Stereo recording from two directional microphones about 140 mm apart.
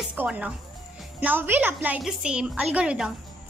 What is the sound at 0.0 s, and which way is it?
A woman's voice, 10° right (ahead or behind).